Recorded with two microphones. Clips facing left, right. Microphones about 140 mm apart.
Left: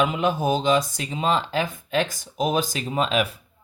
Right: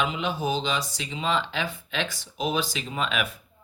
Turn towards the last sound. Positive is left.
turn(degrees=35)  # may be behind; listen again after turning